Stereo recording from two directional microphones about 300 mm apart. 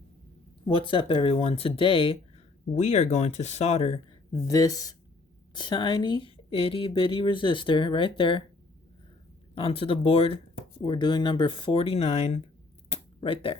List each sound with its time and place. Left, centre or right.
0.6 s speech: centre
9.6 s speech: centre
12.9 s a sound: centre